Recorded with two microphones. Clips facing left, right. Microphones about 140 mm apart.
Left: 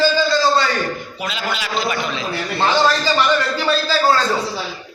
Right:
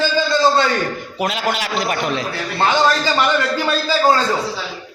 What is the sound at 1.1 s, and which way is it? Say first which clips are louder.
A man's voice: right 4 dB; 70° right (ahead or behind).